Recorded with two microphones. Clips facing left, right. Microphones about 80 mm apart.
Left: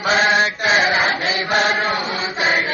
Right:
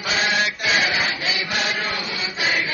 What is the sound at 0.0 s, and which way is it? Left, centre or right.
Chant, left.